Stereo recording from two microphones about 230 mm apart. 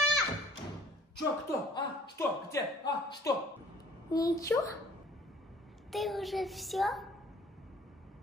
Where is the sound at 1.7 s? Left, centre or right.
Centre.